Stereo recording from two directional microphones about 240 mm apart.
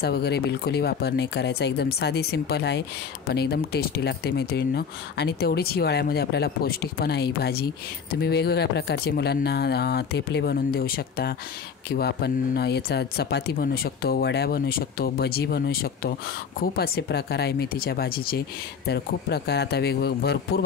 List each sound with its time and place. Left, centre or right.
0.0 s speech: left